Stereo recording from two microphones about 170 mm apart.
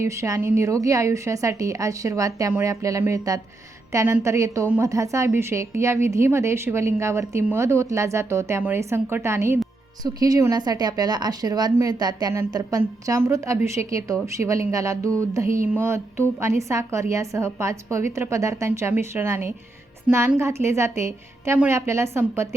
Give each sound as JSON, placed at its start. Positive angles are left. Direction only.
{"t": 0.0, "sound": "a woman's voice", "side_deg": -15}